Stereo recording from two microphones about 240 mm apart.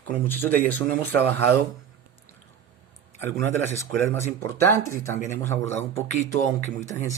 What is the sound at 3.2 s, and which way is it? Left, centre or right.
Speech, centre.